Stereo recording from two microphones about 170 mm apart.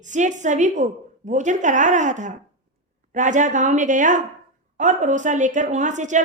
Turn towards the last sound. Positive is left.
turn(degrees=-45)  # may be behind; listen again after turning